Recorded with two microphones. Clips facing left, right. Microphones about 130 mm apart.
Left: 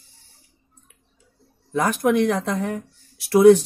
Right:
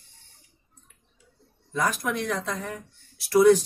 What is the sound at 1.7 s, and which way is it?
Speech, 60° left (ahead or behind).